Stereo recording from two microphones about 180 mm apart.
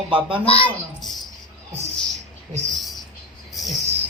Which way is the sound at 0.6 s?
Centre (ahead or behind).